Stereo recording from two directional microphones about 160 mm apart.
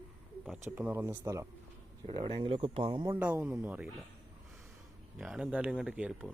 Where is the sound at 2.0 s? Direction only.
30° right (ahead or behind).